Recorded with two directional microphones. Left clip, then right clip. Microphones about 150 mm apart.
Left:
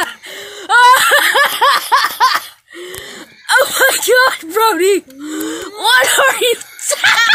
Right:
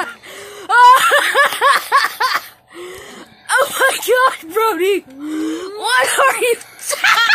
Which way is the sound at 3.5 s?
30° left (ahead or behind).